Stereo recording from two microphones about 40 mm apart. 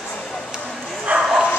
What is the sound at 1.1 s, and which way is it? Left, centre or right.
Bow-wow, right.